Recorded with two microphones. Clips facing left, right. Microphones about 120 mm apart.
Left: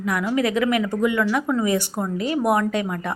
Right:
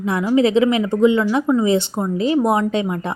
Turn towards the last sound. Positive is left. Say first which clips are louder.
# right 3 dB
turn(degrees=-25)  # may be behind; listen again after turning